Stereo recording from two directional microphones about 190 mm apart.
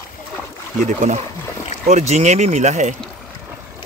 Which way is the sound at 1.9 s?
35° right (ahead or behind).